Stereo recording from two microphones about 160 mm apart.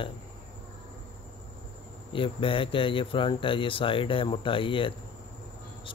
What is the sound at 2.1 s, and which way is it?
Speech, 30° left (ahead or behind).